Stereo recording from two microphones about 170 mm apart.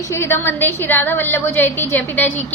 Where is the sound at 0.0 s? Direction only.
15° left (ahead or behind).